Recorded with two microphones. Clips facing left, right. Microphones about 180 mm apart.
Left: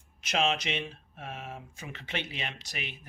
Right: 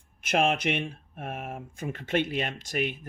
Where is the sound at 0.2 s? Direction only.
55° right (ahead or behind).